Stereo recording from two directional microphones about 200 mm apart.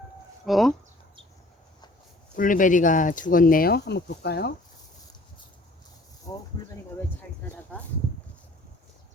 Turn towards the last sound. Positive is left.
turn(degrees=5)  # may be behind; listen again after turning